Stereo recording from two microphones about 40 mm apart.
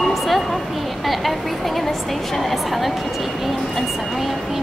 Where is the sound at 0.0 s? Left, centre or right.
Centre.